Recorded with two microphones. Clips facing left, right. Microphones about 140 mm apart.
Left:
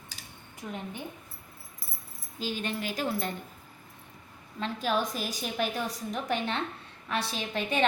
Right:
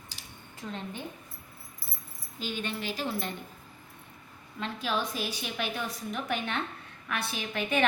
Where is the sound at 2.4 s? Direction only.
40° left (ahead or behind).